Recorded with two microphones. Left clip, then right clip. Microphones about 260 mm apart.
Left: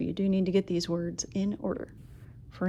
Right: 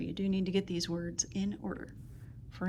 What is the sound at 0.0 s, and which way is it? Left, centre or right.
Speech, left.